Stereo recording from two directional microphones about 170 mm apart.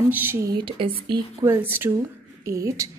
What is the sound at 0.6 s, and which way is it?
Speech, 30° right (ahead or behind).